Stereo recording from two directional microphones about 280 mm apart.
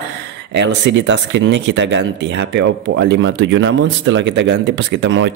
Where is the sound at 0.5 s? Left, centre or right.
Right.